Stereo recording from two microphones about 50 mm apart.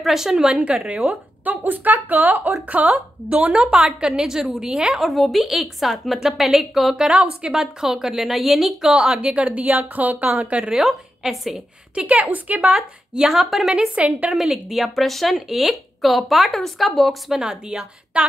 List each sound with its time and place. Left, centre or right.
0.0 s a woman's voice: centre
1.0 s speech: right
3.5 s a woman's voice: centre
5.0 s a woman's voice: centre
9.3 s speech: right
10.6 s speech: centre
12.3 s speech: right
13.1 s a woman's voice: centre
13.4 s speech: centre
13.7 s a woman's voice: right
14.3 s speech: centre
17.3 s a woman's voice: centre